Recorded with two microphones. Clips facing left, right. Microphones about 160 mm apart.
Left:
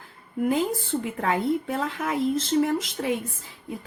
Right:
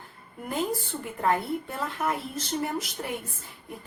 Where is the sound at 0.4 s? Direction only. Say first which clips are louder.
Left 5 dB; 90° left.